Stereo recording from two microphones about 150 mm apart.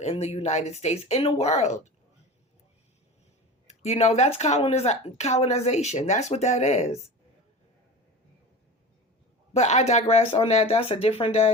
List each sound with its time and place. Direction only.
0.0 s speech: 45° left (ahead or behind)
3.7 s speech: 45° left (ahead or behind)
9.5 s speech: 50° left (ahead or behind)